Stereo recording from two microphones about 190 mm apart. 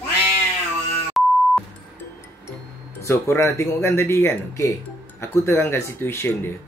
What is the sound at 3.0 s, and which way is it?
Speech, 15° left (ahead or behind).